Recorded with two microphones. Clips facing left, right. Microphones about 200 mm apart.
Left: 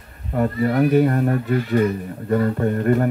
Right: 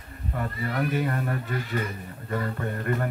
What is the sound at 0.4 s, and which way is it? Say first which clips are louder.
Speech: left 11 dB; 45° left (ahead or behind).